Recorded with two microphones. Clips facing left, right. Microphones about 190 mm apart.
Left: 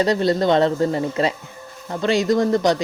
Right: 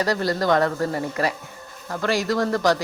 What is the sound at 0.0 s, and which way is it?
Speech, 25° left (ahead or behind).